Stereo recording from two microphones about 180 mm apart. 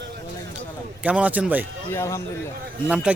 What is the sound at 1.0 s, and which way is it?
Speech, 10° right (ahead or behind).